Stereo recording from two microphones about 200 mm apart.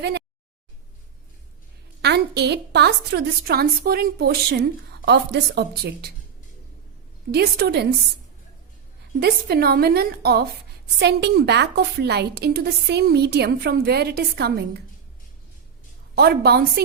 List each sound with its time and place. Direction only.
2.0 s a woman's voice: 55° right (ahead or behind)
7.3 s a woman's voice: 55° right (ahead or behind)
9.2 s a woman's voice: 50° right (ahead or behind)
16.1 s a woman's voice: 50° right (ahead or behind)